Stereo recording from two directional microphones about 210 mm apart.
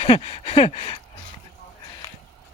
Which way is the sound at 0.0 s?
25° left (ahead or behind).